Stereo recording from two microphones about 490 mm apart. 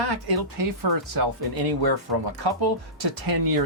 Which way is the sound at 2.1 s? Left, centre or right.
Right.